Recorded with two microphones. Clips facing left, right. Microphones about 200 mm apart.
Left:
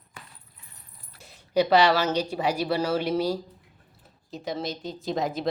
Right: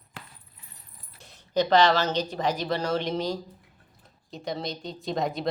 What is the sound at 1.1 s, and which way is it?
Speech, 5° left (ahead or behind).